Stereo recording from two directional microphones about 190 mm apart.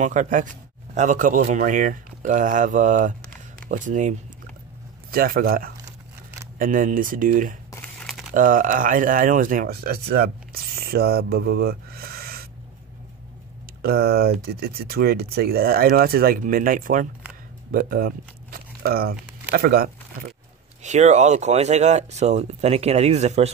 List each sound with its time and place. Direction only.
0.0 s speech: 40° right (ahead or behind)
5.1 s speech: 50° right (ahead or behind)
8.0 s a sound: centre (ahead or behind)
8.3 s speech: 45° right (ahead or behind)
13.8 s speech: 55° right (ahead or behind)
20.8 s speech: 40° right (ahead or behind)